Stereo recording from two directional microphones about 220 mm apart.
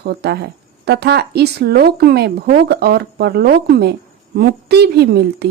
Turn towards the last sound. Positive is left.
turn(degrees=-50)  # may be behind; listen again after turning